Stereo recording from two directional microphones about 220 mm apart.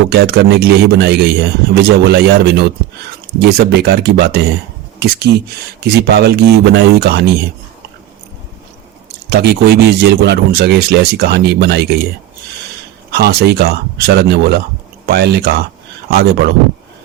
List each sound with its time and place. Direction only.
0.1 s speech: 45° right (ahead or behind)
9.3 s speech: 45° right (ahead or behind)
13.1 s speech: 45° right (ahead or behind)